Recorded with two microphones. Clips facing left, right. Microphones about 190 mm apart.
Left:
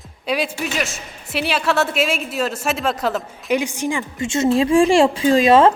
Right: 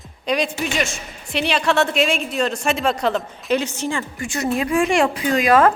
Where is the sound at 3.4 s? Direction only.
15° left (ahead or behind).